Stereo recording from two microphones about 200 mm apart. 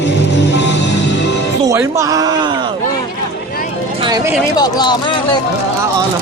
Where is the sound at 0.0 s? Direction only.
60° left (ahead or behind).